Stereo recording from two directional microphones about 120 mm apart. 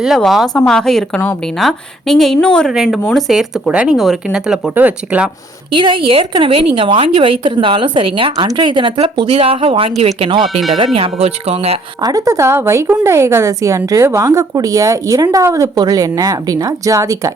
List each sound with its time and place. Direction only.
0.0 s speech: centre (ahead or behind)
2.7 s speech: 5° right (ahead or behind)
5.7 s a woman's voice: 45° right (ahead or behind)
12.0 s speech: 30° right (ahead or behind)